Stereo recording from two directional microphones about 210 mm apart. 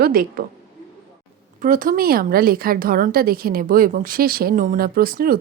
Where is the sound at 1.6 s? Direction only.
40° right (ahead or behind).